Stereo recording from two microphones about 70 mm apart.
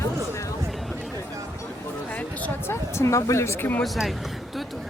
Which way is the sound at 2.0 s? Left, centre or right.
Left.